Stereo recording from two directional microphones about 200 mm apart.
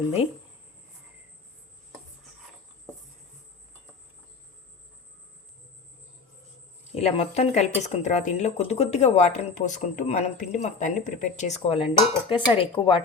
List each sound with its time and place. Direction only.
6.9 s speech: 35° left (ahead or behind)